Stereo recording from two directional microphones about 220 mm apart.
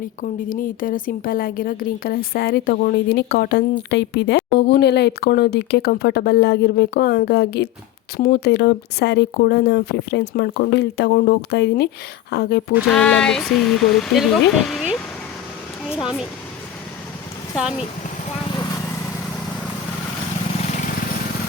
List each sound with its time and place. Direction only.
0.2 s a woman's voice: 40° left (ahead or behind)
12.9 s speech: 5° left (ahead or behind)
17.6 s speech: 5° right (ahead or behind)